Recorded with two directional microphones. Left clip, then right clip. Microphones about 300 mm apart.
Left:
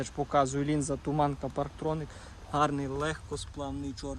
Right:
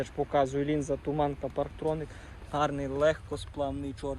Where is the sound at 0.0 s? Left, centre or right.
Left.